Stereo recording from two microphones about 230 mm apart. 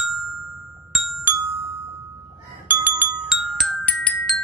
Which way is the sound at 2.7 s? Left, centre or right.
Centre.